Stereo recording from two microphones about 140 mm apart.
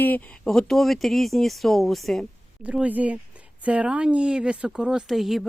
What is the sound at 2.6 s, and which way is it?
A woman's voice, 10° right (ahead or behind).